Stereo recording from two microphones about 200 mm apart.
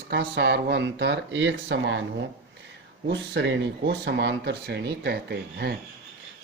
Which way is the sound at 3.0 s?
60° right (ahead or behind).